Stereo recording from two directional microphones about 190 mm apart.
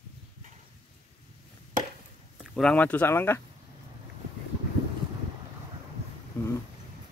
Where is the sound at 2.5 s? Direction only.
5° left (ahead or behind).